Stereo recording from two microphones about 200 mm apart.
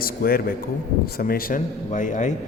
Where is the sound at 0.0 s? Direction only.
50° left (ahead or behind).